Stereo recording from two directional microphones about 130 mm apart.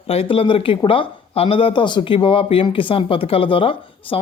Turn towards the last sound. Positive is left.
turn(degrees=45)  # may be behind; listen again after turning